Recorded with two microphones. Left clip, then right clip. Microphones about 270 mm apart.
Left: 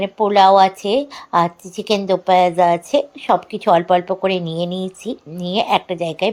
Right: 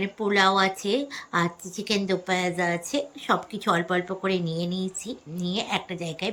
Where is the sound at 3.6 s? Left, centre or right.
Left.